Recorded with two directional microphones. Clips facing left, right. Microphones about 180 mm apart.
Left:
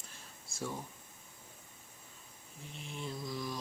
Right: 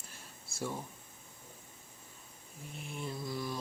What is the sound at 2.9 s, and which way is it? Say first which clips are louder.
Speech: right 1 dB; 5° right (ahead or behind).